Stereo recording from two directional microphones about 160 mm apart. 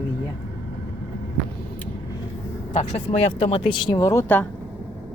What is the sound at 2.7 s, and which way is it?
Speech, 40° left (ahead or behind).